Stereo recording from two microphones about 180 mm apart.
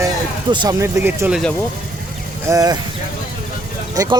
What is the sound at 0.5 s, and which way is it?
Speech, 25° right (ahead or behind).